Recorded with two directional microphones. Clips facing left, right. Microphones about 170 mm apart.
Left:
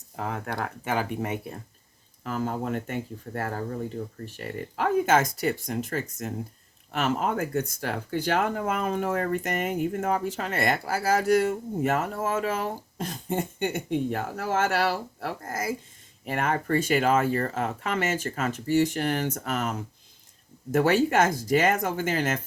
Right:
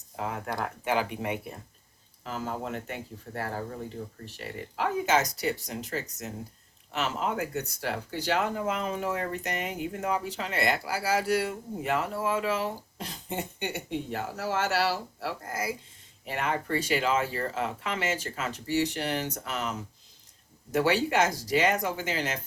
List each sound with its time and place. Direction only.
0.5 s speech: 45° left (ahead or behind)
20.7 s speech: 50° left (ahead or behind)